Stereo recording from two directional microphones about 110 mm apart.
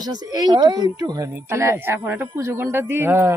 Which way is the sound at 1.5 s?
25° right (ahead or behind).